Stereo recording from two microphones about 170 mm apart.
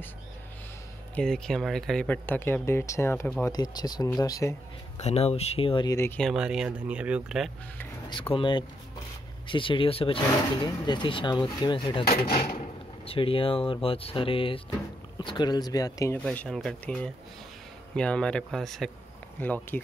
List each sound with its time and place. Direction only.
1.1 s speech: 5° left (ahead or behind); by 4.6 s 20° left (ahead or behind)
5.0 s speech: 35° left (ahead or behind)
5.9 s speech: 15° left (ahead or behind)
6.2 s speech: 5° right (ahead or behind)
8.1 s speech: 30° left (ahead or behind)
12.3 s a sound: 55° left (ahead or behind)
12.5 s speech: 35° left (ahead or behind)
16.3 s speech: 5° left (ahead or behind)